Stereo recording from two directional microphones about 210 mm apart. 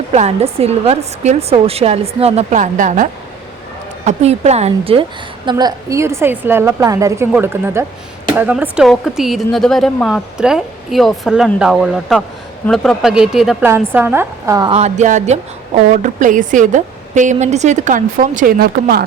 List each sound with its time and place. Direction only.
0.1 s a woman's voice: 30° right (ahead or behind)
14.8 s a woman's voice: 35° right (ahead or behind)